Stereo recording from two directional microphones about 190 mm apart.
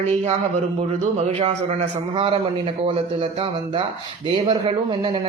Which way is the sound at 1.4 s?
30° right (ahead or behind).